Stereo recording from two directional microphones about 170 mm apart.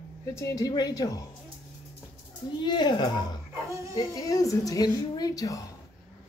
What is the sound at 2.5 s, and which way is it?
Speech, 25° left (ahead or behind).